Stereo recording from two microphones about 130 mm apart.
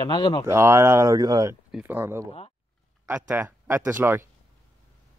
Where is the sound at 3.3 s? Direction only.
15° right (ahead or behind).